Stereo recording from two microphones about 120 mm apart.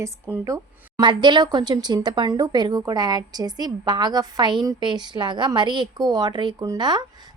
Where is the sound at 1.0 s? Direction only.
40° right (ahead or behind).